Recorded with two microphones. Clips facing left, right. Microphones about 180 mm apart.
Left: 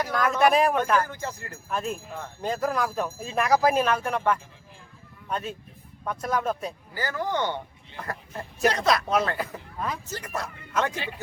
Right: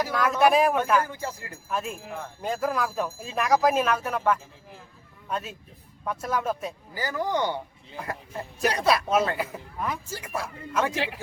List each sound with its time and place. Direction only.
0.0 s speech: centre (ahead or behind)
10.9 s speech: 80° right